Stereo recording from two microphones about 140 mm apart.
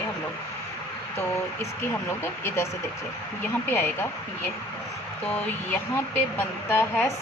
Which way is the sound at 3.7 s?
15° left (ahead or behind).